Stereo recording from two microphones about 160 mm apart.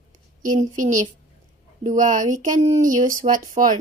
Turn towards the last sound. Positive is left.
turn(degrees=-55)  # may be behind; listen again after turning